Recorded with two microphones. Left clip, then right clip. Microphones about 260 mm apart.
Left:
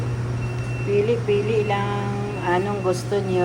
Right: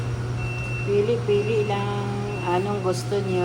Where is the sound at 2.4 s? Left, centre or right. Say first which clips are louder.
Left 2 dB; centre.